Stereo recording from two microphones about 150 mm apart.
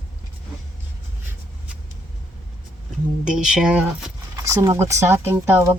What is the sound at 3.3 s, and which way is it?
Speech, 5° right (ahead or behind).